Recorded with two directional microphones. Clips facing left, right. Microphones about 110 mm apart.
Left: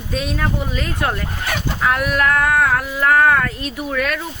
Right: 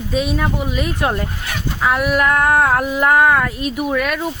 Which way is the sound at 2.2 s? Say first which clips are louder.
Right 1 dB; 30° right (ahead or behind).